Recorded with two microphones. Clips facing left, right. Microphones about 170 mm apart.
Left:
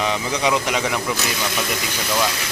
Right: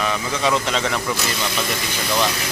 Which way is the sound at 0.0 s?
20° left (ahead or behind).